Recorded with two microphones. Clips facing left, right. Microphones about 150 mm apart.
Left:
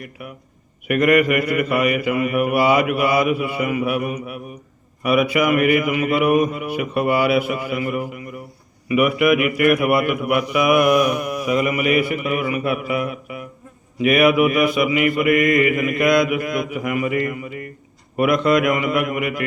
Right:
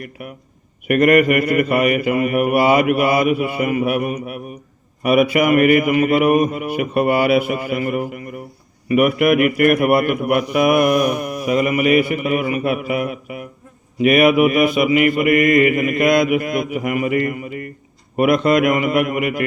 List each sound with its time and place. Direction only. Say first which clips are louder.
0.9 s mantra: right 3 dB; 50° right (ahead or behind)
11.6 s mantra: right 6 dB; 30° right (ahead or behind)
14.0 s a man's voice: right 2 dB; 25° right (ahead or behind)
18.2 s a man's voice: right 2 dB; 25° right (ahead or behind)